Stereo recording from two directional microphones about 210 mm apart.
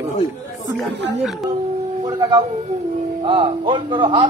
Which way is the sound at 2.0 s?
20° right (ahead or behind).